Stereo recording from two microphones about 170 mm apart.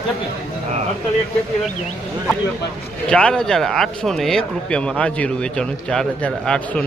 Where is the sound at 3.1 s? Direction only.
5° left (ahead or behind).